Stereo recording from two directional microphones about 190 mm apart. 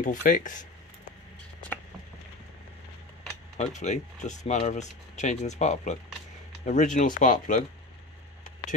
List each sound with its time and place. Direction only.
0.0 s speech: 40° left (ahead or behind)
3.5 s speech: 40° left (ahead or behind)